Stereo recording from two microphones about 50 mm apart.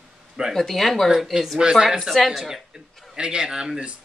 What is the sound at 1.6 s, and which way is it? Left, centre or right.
Speech, centre.